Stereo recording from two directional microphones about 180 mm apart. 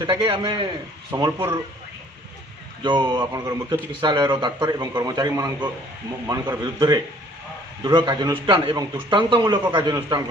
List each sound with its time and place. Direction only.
0.0 s a man's voice: 25° right (ahead or behind)
2.8 s a man's voice: 25° right (ahead or behind)
3.2 s a man's voice: 15° right (ahead or behind)